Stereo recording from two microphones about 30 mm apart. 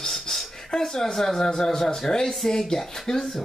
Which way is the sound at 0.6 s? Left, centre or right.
Centre.